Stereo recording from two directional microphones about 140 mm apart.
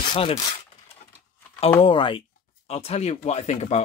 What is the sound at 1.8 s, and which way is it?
Speech, 35° left (ahead or behind).